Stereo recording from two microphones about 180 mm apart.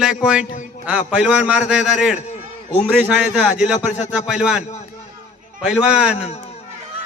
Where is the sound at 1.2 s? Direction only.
5° right (ahead or behind).